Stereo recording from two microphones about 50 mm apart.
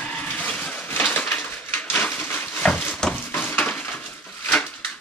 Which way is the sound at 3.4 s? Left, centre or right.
Left.